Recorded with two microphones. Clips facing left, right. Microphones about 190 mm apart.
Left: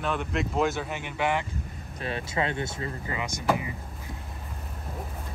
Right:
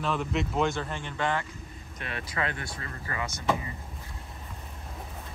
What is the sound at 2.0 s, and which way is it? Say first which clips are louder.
Speech: left 4 dB; 30° left (ahead or behind).